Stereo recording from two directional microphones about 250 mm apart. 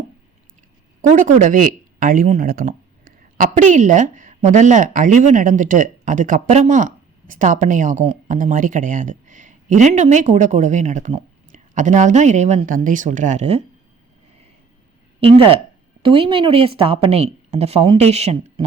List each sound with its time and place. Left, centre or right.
1.0 s a woman's voice: right
15.2 s a woman's voice: right